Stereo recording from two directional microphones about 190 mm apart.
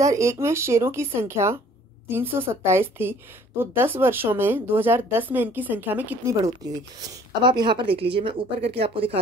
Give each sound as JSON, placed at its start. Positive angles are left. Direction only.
{"t": 0.0, "sound": "a woman's voice", "side_deg": -15}